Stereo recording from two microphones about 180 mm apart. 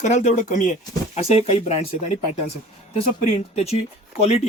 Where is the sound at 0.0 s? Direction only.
40° left (ahead or behind).